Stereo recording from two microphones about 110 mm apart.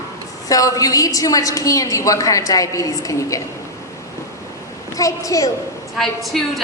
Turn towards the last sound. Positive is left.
turn(degrees=0)  # may be behind; listen again after turning